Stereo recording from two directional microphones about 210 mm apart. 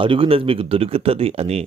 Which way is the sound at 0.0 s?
25° right (ahead or behind).